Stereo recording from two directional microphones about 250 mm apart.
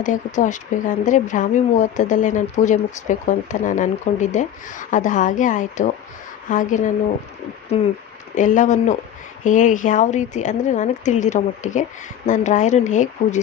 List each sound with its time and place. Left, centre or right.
0.0 s speech: left